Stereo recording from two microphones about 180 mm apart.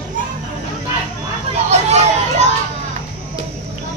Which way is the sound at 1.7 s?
40° right (ahead or behind).